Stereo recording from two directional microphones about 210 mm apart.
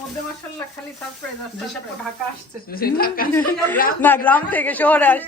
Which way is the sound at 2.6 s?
45° left (ahead or behind).